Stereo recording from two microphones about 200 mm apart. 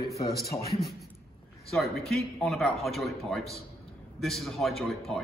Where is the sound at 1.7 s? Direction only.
Centre (ahead or behind).